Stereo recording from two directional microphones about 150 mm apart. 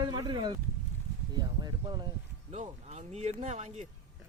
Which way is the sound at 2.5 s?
45° right (ahead or behind).